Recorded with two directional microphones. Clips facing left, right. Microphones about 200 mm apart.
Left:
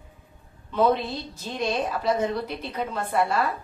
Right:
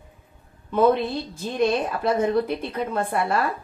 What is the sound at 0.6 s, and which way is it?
A woman's voice, 50° right (ahead or behind).